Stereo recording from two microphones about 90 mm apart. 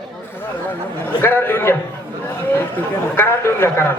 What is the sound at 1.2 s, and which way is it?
A man's voice, 25° left (ahead or behind).